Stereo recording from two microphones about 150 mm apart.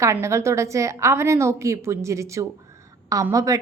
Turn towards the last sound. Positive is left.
turn(degrees=-20)  # may be behind; listen again after turning